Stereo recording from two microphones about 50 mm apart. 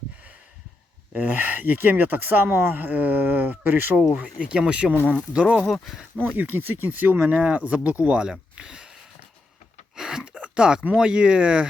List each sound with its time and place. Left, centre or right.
1.1 s speech: right
3.9 s speech: right
5.6 s speech: centre
6.1 s speech: right; by 8.9 s centre
9.9 s a sound: centre
10.3 s a sound: right
10.9 s speech: centre